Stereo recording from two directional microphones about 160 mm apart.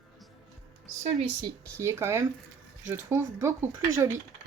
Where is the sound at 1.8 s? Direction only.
15° right (ahead or behind).